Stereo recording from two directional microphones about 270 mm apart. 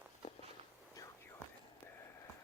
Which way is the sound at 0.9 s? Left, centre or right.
Centre.